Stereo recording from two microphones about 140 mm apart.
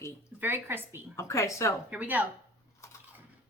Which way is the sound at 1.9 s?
10° right (ahead or behind).